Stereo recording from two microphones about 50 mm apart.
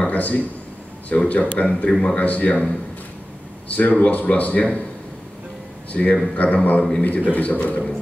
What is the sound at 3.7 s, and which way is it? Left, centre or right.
Speech, left.